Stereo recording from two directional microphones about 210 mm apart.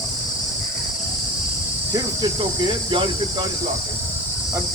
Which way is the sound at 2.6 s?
25° right (ahead or behind).